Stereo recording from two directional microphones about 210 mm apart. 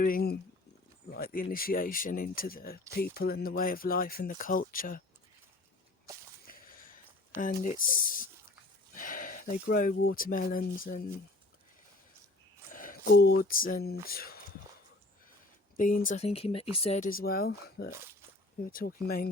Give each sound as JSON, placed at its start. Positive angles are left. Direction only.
{"t": 0.0, "sound": "speech", "side_deg": 45}
{"t": 6.5, "sound": "a sound", "side_deg": 40}
{"t": 7.4, "sound": "speech", "side_deg": 40}
{"t": 12.7, "sound": "speech", "side_deg": 40}
{"t": 15.8, "sound": "speech", "side_deg": 40}